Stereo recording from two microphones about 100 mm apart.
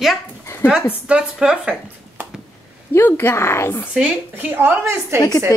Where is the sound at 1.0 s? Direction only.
10° right (ahead or behind).